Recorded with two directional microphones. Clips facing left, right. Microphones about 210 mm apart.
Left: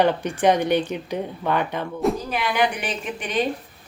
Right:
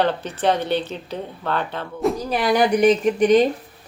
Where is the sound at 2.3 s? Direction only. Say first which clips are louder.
Right 5 dB; 35° right (ahead or behind).